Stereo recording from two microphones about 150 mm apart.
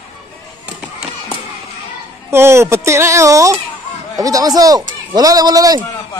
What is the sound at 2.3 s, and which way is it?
Speech, 15° right (ahead or behind).